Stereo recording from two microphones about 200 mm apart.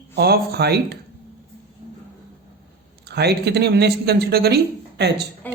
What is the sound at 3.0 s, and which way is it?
Speech, 55° right (ahead or behind).